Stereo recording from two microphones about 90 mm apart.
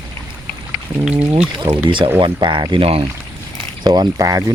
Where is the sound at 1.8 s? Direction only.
65° right (ahead or behind); by 3.0 s 85° right.